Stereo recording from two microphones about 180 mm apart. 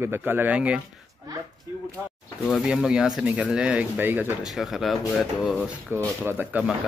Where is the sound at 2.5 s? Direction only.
5° right (ahead or behind).